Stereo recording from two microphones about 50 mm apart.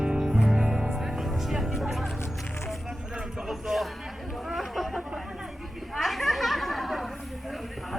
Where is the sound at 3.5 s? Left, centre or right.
Centre.